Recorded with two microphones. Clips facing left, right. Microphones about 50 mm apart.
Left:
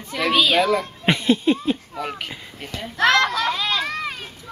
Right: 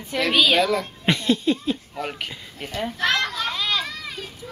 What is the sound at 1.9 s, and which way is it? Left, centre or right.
Speech, centre.